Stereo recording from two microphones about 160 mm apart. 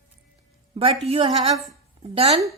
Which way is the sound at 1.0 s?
35° right (ahead or behind).